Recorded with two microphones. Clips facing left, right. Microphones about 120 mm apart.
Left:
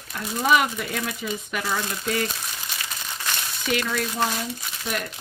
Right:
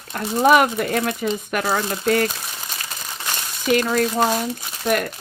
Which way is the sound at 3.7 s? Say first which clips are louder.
Right 8 dB; 40° right (ahead or behind).